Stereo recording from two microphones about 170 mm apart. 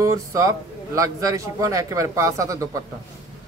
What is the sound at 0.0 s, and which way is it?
Speech, 20° right (ahead or behind).